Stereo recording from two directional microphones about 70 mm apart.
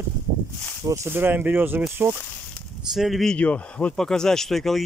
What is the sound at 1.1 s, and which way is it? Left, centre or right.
Speech, right.